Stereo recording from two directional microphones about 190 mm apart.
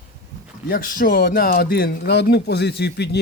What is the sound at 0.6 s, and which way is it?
Speech, 50° left (ahead or behind).